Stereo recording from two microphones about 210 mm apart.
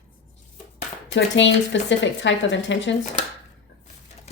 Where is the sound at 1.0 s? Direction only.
60° left (ahead or behind).